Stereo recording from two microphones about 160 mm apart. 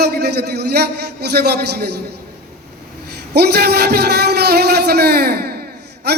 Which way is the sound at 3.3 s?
90° right.